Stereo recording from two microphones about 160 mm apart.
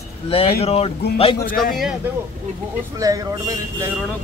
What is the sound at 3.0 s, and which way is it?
Speech, 20° right (ahead or behind).